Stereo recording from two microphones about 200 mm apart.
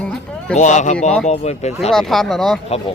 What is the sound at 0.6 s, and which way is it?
Speech, 35° left (ahead or behind).